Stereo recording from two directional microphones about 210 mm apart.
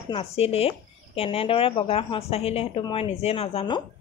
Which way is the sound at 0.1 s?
30° left (ahead or behind).